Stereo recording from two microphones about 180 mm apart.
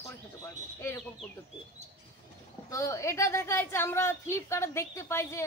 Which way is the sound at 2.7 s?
15° left (ahead or behind).